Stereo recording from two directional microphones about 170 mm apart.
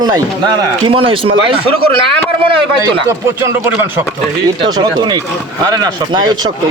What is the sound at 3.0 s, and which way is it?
Speech, 15° right (ahead or behind).